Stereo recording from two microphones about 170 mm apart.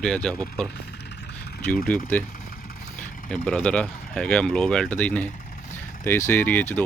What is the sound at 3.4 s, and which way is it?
Speech, 5° left (ahead or behind).